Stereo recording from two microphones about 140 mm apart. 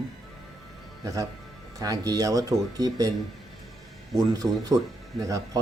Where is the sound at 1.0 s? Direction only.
25° right (ahead or behind).